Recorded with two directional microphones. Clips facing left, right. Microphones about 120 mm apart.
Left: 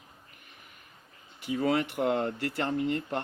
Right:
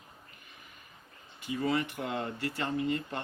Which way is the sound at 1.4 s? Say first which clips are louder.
Left 3 dB; 65° left (ahead or behind).